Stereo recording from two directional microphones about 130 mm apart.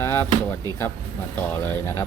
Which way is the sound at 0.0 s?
20° left (ahead or behind).